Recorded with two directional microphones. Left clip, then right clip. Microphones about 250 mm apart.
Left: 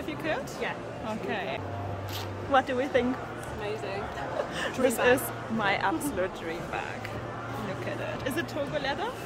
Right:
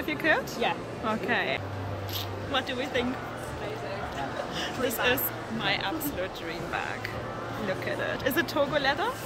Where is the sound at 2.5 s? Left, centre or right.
Centre.